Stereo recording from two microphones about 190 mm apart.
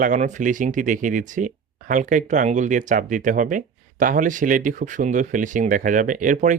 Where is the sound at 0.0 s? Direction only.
40° right (ahead or behind).